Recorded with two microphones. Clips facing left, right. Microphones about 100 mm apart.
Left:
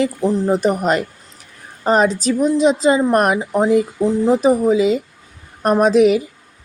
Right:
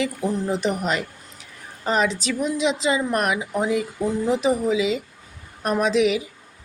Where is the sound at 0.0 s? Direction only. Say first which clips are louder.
Left 7 dB; 40° left (ahead or behind).